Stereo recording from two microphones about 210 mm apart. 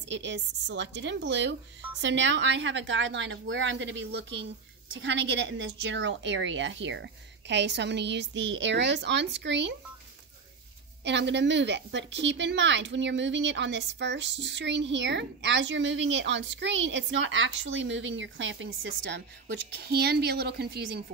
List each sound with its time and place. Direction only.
0.1 s a woman's voice: 60° right (ahead or behind)
11.1 s a woman's voice: 55° right (ahead or behind)